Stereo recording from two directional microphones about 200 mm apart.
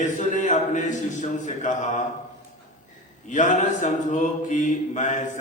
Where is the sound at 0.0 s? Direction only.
40° left (ahead or behind).